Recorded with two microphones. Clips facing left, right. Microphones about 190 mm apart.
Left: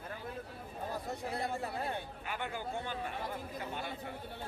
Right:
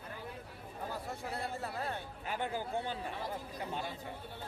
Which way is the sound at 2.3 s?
35° right (ahead or behind).